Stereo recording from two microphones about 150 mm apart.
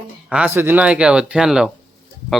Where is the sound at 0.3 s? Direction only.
10° right (ahead or behind).